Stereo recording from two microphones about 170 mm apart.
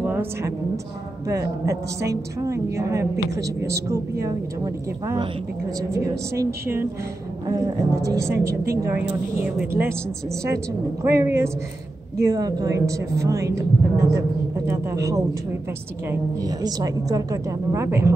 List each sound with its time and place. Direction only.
0.0 s a sound: 15° right (ahead or behind)
1.3 s a woman's voice: 20° right (ahead or behind)
5.0 s a woman's voice: 20° right (ahead or behind)
6.4 s a woman's voice: 15° right (ahead or behind)